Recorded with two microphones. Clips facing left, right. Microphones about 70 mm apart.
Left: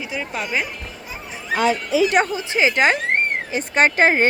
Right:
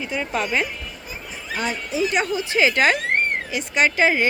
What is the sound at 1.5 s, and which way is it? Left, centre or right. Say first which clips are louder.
Speech: left 7 dB; left.